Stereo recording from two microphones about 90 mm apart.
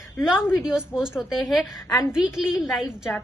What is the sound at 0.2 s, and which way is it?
A woman's voice, 5° right (ahead or behind).